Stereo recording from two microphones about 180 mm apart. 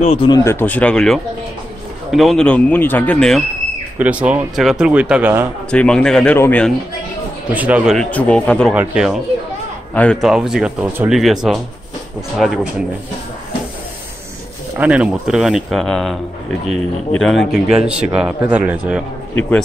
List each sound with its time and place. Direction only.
0.0 s speech: 30° left (ahead or behind)
0.4 s a man's voice: 15° left (ahead or behind)
4.0 s speech: 5° right (ahead or behind)
5.7 s a man's voice: 5° left (ahead or behind)
7.5 s speech: 10° right (ahead or behind)
8.7 s speech: 5° right (ahead or behind)
14.8 s speech: 5° right (ahead or behind)